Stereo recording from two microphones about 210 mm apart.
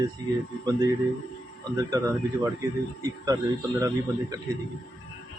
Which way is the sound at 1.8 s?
15° right (ahead or behind).